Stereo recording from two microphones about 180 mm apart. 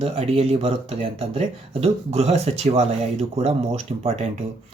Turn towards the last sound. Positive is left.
turn(degrees=-35)  # may be behind; listen again after turning